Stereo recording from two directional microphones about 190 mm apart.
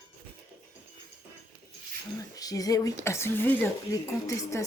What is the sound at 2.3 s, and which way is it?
Speech, 20° left (ahead or behind).